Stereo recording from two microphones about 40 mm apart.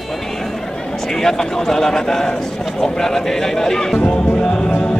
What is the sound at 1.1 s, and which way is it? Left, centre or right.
Speech, centre.